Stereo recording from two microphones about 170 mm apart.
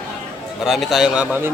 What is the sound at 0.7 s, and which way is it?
Speech, centre (ahead or behind).